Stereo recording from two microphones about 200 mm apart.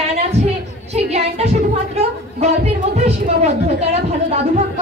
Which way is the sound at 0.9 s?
30° right (ahead or behind).